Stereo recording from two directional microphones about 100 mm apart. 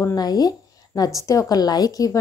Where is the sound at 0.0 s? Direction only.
40° left (ahead or behind).